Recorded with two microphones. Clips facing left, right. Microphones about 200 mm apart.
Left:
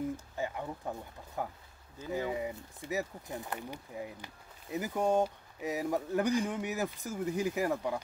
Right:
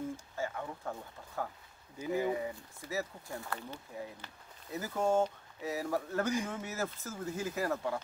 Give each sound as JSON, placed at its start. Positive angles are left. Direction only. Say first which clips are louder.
{"t": 0.4, "sound": "speech", "louder": "even", "side_deg": 20}
{"t": 2.0, "sound": "speech", "louder": "right 2 dB", "side_deg": -15}
{"t": 2.3, "sound": "speech", "louder": "left 1 dB", "side_deg": 20}